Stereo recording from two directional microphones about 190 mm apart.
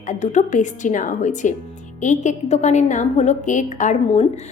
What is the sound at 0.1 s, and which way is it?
A woman's voice, 40° left (ahead or behind).